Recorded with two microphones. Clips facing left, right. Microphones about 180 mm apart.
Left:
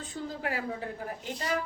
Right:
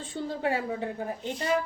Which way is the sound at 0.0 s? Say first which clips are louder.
Right 5 dB; 30° right (ahead or behind).